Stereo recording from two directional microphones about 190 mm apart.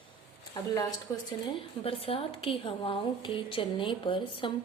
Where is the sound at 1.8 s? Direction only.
30° left (ahead or behind).